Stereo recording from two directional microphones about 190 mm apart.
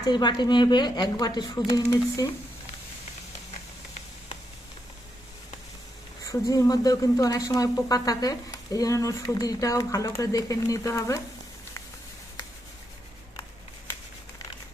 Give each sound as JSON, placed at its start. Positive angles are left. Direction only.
{"t": 0.0, "sound": "a woman's voice", "side_deg": 20}
{"t": 6.2, "sound": "speech", "side_deg": 20}